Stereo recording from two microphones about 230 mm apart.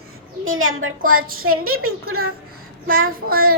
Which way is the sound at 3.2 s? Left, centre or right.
Right.